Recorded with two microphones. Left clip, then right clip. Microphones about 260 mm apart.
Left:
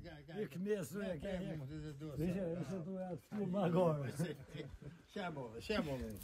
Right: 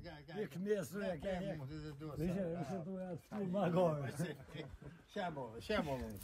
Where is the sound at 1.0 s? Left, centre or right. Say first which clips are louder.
Right 2 dB; centre.